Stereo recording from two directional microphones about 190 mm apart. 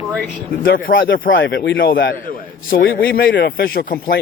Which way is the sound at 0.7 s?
85° left.